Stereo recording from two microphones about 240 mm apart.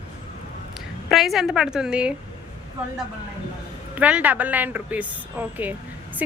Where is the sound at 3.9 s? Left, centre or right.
Centre.